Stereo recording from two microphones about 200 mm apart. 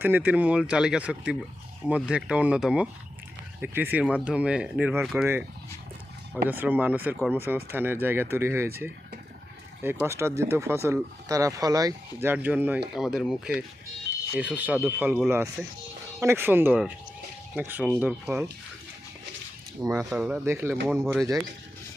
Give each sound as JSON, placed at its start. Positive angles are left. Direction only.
{"t": 0.0, "sound": "speech", "side_deg": -10}
{"t": 6.5, "sound": "speech", "side_deg": -10}
{"t": 19.8, "sound": "speech", "side_deg": -15}
{"t": 20.1, "sound": "speech", "side_deg": -5}